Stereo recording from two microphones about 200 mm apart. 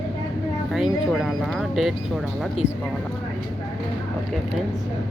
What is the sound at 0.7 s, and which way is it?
Speech, centre (ahead or behind).